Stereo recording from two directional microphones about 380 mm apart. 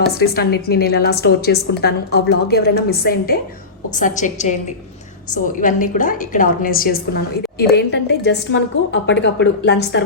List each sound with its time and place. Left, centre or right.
0.1 s a woman's voice: left